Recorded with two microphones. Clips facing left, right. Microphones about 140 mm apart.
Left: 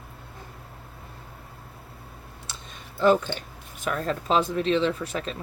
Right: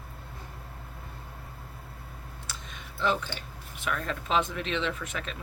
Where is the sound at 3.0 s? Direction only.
45° left (ahead or behind).